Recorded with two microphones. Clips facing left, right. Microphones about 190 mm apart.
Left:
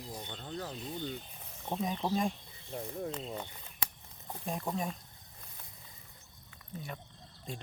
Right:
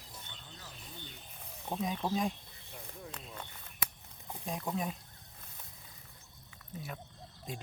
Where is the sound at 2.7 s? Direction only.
35° left (ahead or behind).